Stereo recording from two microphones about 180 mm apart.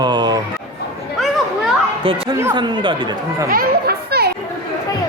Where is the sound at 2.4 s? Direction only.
20° right (ahead or behind).